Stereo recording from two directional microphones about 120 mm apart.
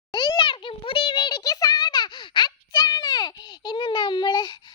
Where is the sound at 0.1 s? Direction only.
45° left (ahead or behind).